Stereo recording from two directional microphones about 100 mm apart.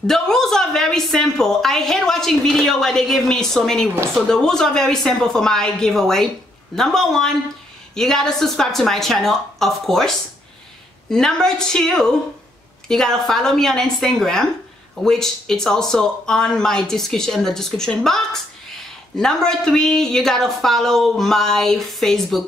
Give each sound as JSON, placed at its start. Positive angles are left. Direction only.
{"t": 0.0, "sound": "a woman's voice", "side_deg": 5}